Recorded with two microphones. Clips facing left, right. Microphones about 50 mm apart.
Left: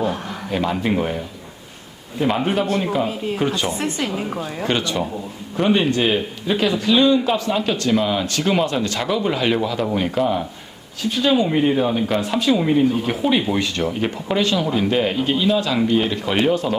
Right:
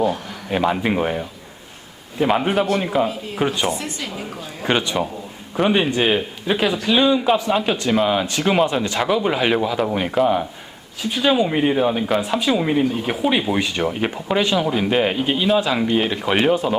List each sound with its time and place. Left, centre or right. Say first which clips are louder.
0.5 s speech: right 2 dB; centre
3.8 s a woman's voice: left 5 dB; left
4.6 s speech: right 2 dB; centre